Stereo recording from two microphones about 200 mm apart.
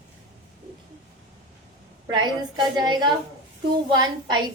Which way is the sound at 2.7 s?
20° right (ahead or behind).